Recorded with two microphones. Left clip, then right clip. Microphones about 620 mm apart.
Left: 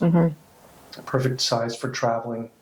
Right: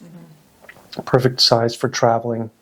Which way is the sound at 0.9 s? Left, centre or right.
Right.